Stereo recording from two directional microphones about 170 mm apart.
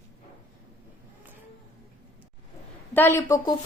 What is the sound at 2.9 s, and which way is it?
Speech, 15° left (ahead or behind).